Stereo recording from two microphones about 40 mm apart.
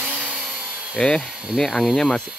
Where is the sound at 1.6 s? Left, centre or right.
Centre.